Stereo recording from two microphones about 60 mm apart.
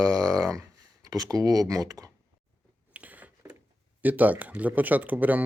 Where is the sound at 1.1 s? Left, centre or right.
Right.